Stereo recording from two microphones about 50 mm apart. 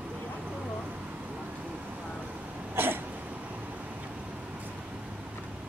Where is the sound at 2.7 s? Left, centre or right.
Right.